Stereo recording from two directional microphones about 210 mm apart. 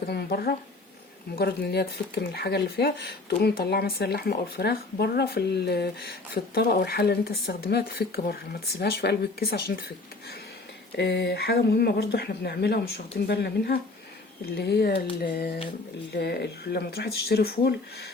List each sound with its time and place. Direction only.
0.0 s speech: 50° left (ahead or behind)
10.9 s speech: 55° left (ahead or behind)